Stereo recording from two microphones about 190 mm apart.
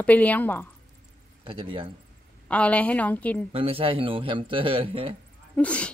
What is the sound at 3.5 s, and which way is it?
Speech, 30° right (ahead or behind).